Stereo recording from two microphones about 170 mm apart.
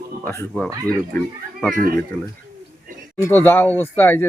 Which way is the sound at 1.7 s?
55° right (ahead or behind).